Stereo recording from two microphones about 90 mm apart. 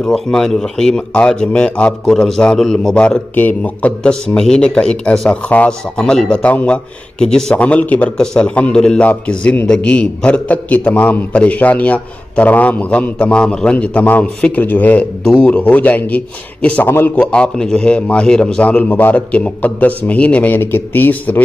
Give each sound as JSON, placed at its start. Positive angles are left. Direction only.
{"t": 0.0, "sound": "a man's voice", "side_deg": 5}
{"t": 17.1, "sound": "speech", "side_deg": 10}